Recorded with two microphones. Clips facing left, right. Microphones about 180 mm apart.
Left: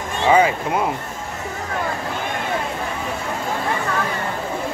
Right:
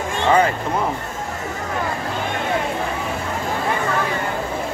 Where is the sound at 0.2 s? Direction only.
10° left (ahead or behind).